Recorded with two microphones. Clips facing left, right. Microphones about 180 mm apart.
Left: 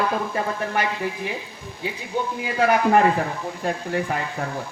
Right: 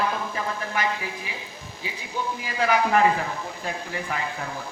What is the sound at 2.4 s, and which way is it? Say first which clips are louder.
A man's voice: left 3 dB; 55° left (ahead or behind).